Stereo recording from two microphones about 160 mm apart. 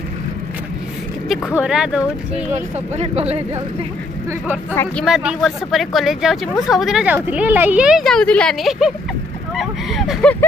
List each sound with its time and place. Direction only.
1.5 s speech: 5° right (ahead or behind)
2.5 s speech: 40° right (ahead or behind)
5.0 s speech: 5° right (ahead or behind)